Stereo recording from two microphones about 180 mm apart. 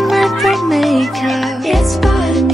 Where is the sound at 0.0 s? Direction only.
Centre (ahead or behind).